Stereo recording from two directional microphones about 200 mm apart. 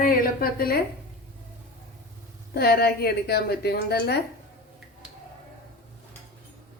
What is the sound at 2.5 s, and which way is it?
A woman's voice, 50° left (ahead or behind).